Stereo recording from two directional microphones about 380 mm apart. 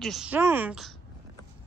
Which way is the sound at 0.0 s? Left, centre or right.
Centre.